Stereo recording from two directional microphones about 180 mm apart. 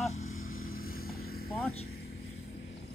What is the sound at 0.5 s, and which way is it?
Vehicle, 55° left (ahead or behind).